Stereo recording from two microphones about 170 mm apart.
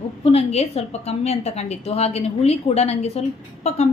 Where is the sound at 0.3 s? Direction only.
35° left (ahead or behind).